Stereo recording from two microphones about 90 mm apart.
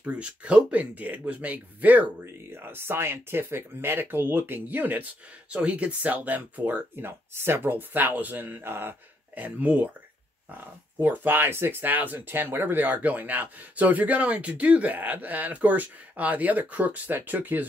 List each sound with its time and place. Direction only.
0.0 s speech: 15° right (ahead or behind)
11.0 s speech: 20° right (ahead or behind)